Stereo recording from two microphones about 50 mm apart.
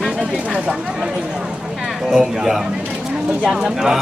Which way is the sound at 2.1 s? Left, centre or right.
Centre.